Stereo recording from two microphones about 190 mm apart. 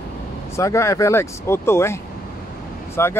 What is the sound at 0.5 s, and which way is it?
Speech, 15° left (ahead or behind).